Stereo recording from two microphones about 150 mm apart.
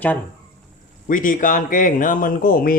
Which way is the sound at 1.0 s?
65° left (ahead or behind).